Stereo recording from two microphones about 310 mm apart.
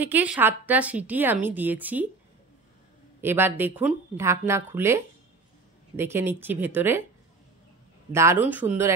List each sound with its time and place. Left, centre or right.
0.0 s a woman's voice: centre
3.2 s a woman's voice: centre
8.1 s a woman's voice: centre